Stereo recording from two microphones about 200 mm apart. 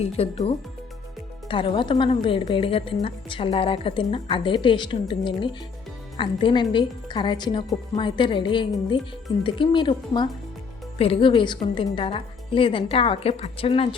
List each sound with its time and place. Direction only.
0.0 s a woman's voice: 30° left (ahead or behind)